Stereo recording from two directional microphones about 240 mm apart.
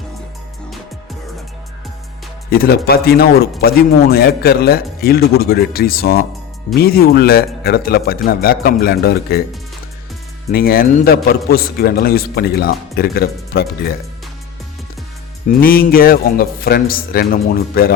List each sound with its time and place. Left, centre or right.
2.5 s a man's voice: left
10.5 s a man's voice: left
15.4 s a man's voice: left